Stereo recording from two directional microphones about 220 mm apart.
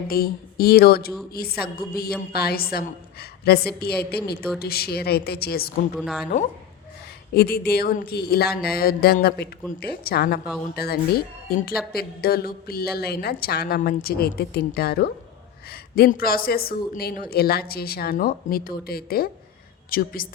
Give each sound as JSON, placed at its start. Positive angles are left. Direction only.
{"t": 0.1, "sound": "speech", "side_deg": 45}
{"t": 6.0, "sound": "speech", "side_deg": 0}
{"t": 7.3, "sound": "a woman's voice", "side_deg": 45}